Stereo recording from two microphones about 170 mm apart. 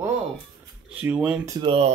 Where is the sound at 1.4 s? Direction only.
25° right (ahead or behind).